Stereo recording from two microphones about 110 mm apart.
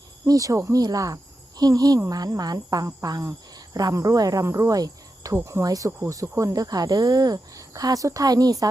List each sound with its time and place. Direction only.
0.3 s speech: 30° right (ahead or behind)
2.0 s cricket: 35° right (ahead or behind)